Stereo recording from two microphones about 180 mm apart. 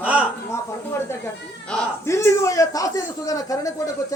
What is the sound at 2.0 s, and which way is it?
A man's voice, 15° left (ahead or behind).